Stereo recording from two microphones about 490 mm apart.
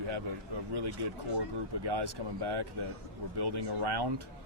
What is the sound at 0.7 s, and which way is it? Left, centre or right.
Speech, right.